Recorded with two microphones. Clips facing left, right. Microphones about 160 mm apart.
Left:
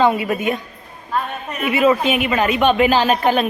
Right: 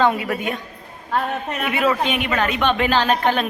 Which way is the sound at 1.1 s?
70° right (ahead or behind).